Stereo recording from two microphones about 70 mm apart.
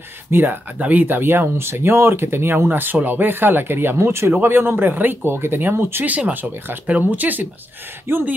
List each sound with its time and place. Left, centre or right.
0.3 s speech: right